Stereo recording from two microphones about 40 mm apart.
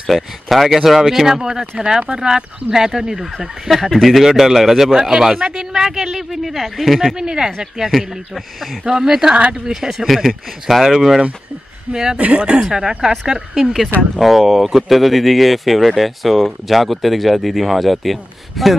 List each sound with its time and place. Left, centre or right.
0.1 s speech: centre
7.2 s speech: centre
12.2 s speech: right
12.5 s speech: centre
14.2 s speech: centre